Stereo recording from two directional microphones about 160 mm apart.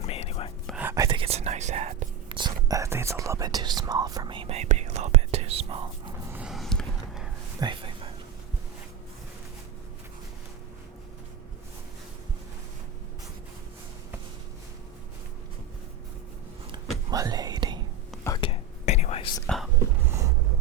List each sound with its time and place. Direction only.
0.0 s whispering: 40° left (ahead or behind)
0.8 s whispering: 15° right (ahead or behind)
1.0 s whispering: 35° right (ahead or behind)
2.3 s whispering: 25° right (ahead or behind)
6.3 s a sound: 5° right (ahead or behind)
7.6 s a sound: 30° right (ahead or behind)
17.1 s whispering: 25° right (ahead or behind)
18.4 s whispering: 35° left (ahead or behind)
18.9 s whispering: 45° left (ahead or behind)
20.1 s a sound: 20° right (ahead or behind)